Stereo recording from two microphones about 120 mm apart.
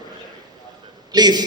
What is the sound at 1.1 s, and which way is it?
Speech, 35° right (ahead or behind).